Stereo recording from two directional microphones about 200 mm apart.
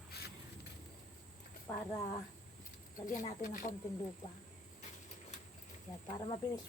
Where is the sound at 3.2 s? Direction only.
40° left (ahead or behind).